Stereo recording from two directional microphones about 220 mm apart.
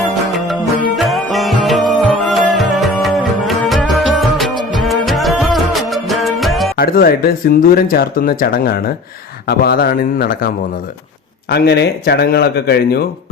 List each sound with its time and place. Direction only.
0.0 s music: centre (ahead or behind)
6.7 s speech: 40° left (ahead or behind)